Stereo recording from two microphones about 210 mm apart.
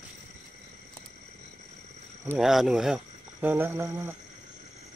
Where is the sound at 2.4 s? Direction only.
Centre (ahead or behind).